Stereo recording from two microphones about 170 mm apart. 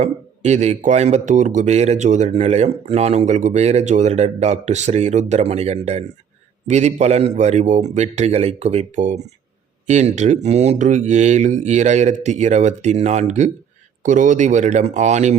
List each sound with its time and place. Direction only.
0.0 s speech: 40° right (ahead or behind)